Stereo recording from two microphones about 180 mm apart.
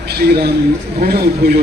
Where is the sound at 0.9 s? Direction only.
60° right (ahead or behind).